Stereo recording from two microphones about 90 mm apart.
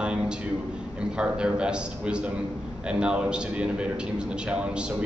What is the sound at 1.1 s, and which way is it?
A man's voice, 10° right (ahead or behind).